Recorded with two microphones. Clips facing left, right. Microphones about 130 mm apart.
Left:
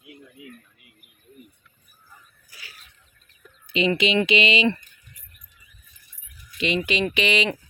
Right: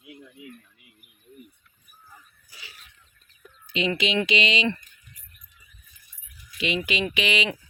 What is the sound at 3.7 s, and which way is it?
Speech, centre (ahead or behind).